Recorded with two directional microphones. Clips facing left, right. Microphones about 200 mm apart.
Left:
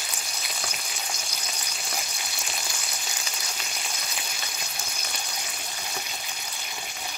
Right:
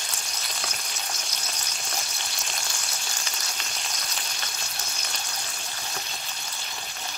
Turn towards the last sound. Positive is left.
turn(degrees=10)  # may be behind; listen again after turning